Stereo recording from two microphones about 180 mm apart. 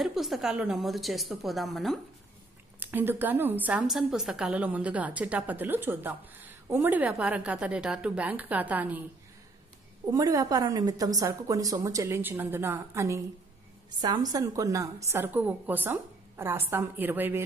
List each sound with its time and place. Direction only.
0.0 s a woman's voice: centre (ahead or behind)
2.8 s a woman's voice: 10° right (ahead or behind)
10.1 s a woman's voice: 20° right (ahead or behind)